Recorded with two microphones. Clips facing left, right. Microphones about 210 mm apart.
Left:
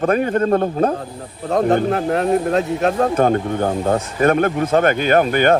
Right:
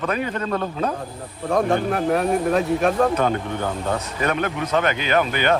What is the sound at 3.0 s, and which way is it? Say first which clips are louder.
Speech: left 4 dB; 45° left (ahead or behind).